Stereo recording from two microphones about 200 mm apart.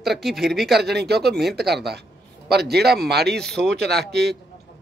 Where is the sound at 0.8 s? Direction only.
55° right (ahead or behind).